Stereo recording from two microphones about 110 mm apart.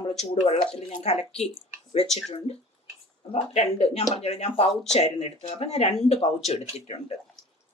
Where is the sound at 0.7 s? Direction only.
70° left (ahead or behind).